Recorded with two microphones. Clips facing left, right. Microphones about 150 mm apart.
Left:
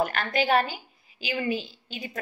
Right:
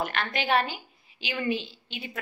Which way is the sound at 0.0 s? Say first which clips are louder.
Left 4 dB; 40° left (ahead or behind).